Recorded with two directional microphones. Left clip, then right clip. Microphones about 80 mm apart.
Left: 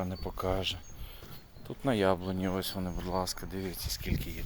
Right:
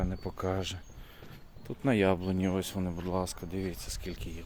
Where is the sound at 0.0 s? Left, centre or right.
Right.